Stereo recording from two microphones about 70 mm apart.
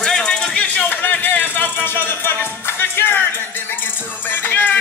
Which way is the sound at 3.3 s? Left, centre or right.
Left.